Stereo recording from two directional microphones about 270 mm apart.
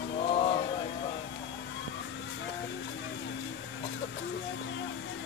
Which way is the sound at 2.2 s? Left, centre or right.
Left.